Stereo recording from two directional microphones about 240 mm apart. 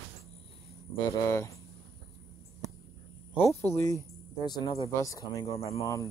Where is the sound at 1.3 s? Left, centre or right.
Centre.